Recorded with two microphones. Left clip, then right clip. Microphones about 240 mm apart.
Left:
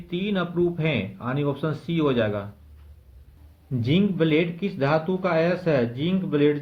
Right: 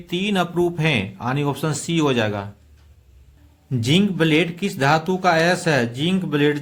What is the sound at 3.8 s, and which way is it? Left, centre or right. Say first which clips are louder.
A man's voice: right 4 dB; right.